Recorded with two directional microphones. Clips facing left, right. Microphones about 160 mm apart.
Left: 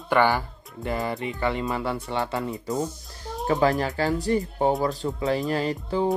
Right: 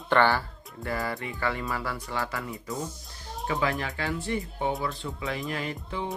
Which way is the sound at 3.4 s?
40° left (ahead or behind).